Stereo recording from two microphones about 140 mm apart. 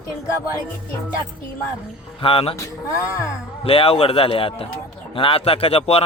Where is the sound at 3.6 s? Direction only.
45° left (ahead or behind).